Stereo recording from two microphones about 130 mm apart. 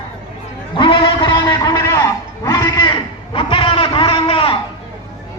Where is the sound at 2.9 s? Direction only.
40° left (ahead or behind).